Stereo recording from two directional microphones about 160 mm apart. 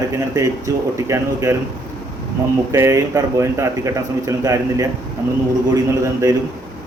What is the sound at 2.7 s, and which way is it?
A man's voice, 20° right (ahead or behind).